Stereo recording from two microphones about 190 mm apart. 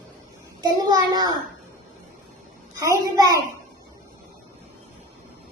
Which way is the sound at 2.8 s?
20° right (ahead or behind).